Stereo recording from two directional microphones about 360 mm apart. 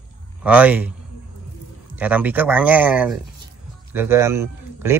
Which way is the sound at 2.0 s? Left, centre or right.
Centre.